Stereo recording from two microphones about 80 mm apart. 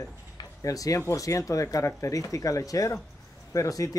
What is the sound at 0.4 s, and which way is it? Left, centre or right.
Speech, left.